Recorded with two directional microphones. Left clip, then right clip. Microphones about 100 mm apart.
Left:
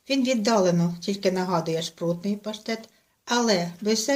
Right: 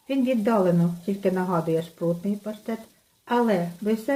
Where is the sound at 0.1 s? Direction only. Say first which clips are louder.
Left 1 dB; 25° right (ahead or behind).